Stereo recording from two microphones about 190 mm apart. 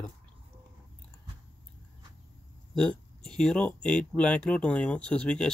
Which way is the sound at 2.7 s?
5° left (ahead or behind).